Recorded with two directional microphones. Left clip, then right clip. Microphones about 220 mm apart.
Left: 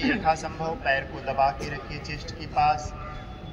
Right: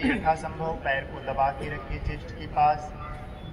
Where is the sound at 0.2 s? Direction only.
30° left (ahead or behind).